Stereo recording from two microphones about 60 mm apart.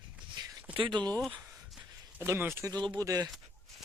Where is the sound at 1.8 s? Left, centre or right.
Right.